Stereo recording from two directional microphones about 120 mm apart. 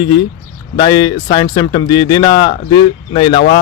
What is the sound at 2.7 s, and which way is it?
Speech, 50° left (ahead or behind).